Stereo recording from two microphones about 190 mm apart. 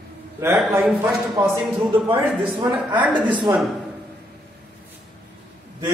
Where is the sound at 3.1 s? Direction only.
25° right (ahead or behind).